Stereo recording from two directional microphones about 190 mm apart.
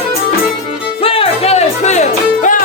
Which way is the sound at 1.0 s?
30° left (ahead or behind).